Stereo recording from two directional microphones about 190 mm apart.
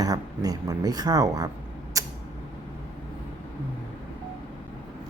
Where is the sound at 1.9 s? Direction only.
15° right (ahead or behind).